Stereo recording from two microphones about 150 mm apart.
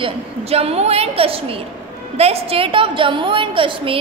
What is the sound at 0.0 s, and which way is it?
A woman's voice, 40° right (ahead or behind).